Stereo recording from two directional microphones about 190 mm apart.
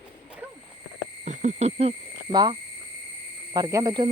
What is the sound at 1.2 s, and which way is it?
Speech, 40° right (ahead or behind).